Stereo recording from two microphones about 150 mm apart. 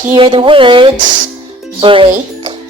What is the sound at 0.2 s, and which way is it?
Speech, 35° right (ahead or behind).